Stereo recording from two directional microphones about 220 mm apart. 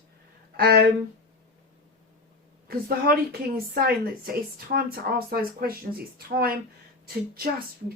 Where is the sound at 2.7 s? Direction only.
45° right (ahead or behind).